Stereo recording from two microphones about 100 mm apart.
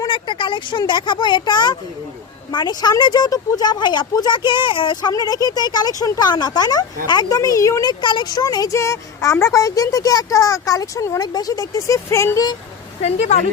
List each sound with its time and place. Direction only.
0.1 s speech: 55° left (ahead or behind)
5.1 s speech: 40° left (ahead or behind)
11.2 s speech: 40° left (ahead or behind)
13.0 s speech: 90° left